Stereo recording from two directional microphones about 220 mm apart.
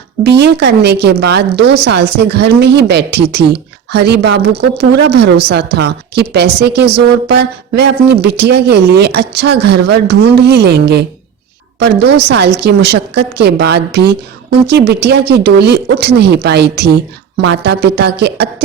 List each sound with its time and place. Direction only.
0.3 s speech: 50° right (ahead or behind)